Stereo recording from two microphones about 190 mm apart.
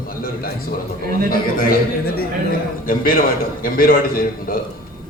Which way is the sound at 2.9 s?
50° left (ahead or behind).